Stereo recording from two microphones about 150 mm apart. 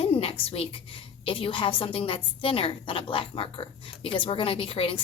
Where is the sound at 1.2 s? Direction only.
35° left (ahead or behind).